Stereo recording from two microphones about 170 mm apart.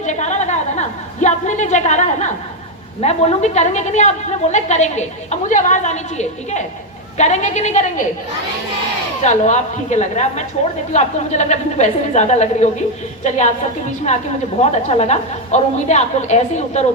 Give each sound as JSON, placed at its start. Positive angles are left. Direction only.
{"t": 0.0, "sound": "a sound", "side_deg": 45}
{"t": 3.0, "sound": "a woman's voice", "side_deg": 40}
{"t": 9.2, "sound": "a woman's voice", "side_deg": 45}
{"t": 14.6, "sound": "a woman's voice", "side_deg": 40}